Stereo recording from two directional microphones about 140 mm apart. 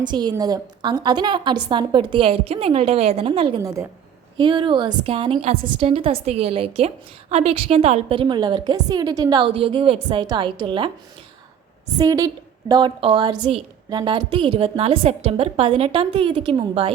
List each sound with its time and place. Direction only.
0.0 s a woman's voice: 30° right (ahead or behind)
9.5 s a woman's voice: 40° right (ahead or behind)
11.9 s a woman's voice: 25° right (ahead or behind)